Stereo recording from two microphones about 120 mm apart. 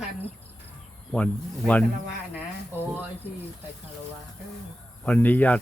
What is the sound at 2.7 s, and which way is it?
Speech, 20° right (ahead or behind).